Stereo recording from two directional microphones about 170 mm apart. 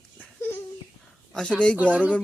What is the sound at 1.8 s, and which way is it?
Speech, 10° right (ahead or behind).